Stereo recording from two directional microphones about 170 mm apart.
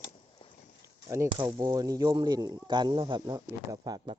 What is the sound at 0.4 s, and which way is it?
Boat, 30° left (ahead or behind).